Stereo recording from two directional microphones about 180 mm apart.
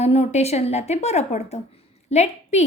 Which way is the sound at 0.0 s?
35° left (ahead or behind).